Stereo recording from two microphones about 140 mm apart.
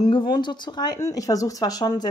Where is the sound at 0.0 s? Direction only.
35° left (ahead or behind).